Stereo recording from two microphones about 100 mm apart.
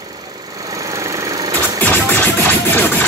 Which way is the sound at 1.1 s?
35° right (ahead or behind).